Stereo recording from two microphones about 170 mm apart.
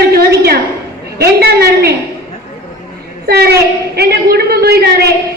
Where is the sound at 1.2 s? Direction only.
70° right (ahead or behind).